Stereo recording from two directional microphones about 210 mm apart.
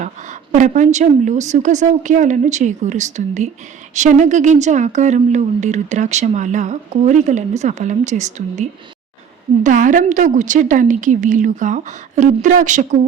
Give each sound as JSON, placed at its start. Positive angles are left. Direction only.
{"t": 0.0, "sound": "speech", "side_deg": -35}
{"t": 9.6, "sound": "speech", "side_deg": -40}